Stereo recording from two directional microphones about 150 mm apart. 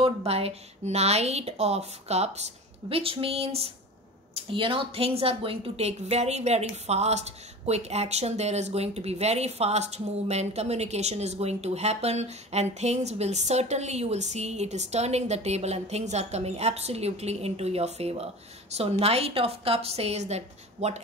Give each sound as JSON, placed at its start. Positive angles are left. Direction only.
{"t": 0.0, "sound": "a woman's voice", "side_deg": -40}